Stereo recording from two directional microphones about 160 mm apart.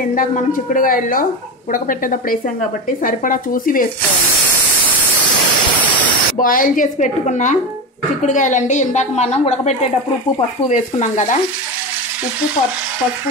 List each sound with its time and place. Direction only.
0.0 s a woman's voice: 60° left (ahead or behind)
6.3 s a woman's voice: 60° left (ahead or behind)